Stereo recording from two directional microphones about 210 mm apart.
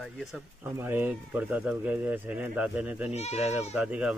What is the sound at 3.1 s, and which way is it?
Speech, 30° left (ahead or behind).